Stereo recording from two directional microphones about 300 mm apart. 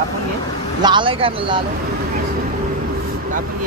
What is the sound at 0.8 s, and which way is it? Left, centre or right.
Speech, centre.